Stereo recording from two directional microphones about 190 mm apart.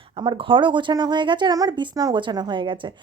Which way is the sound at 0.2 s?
25° right (ahead or behind).